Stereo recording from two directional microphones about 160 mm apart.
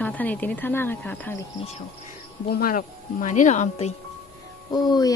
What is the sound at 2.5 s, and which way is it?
Speech, 65° left (ahead or behind).